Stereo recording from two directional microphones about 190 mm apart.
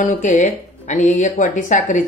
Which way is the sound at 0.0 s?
40° left (ahead or behind).